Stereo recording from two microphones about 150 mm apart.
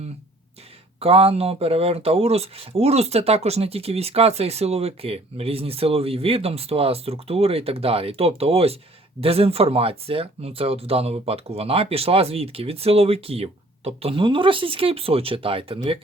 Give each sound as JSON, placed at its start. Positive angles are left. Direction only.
{"t": 0.9, "sound": "speech", "side_deg": -40}